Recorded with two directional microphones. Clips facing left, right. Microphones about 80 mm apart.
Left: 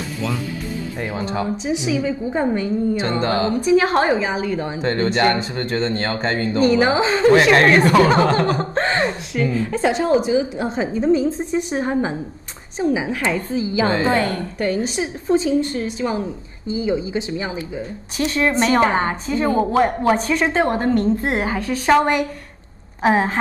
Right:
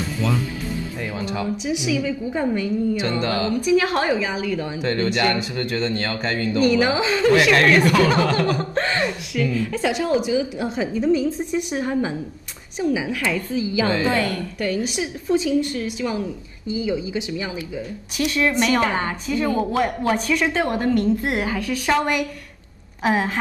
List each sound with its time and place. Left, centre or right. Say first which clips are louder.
0.0 s music: right 1 dB; centre
1.0 s a woman's voice: left 3 dB; left